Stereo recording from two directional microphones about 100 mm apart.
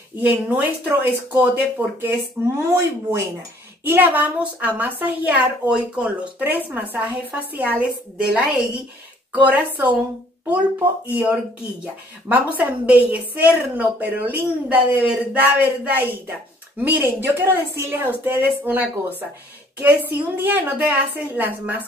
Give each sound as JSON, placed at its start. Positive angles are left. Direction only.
{"t": 0.2, "sound": "a woman's voice", "side_deg": -15}
{"t": 11.1, "sound": "a woman's voice", "side_deg": -15}